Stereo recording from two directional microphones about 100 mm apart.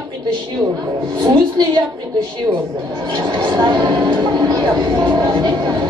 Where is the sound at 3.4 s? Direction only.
50° right (ahead or behind).